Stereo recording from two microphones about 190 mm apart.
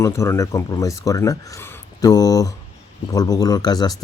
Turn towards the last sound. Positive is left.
turn(degrees=20)  # may be behind; listen again after turning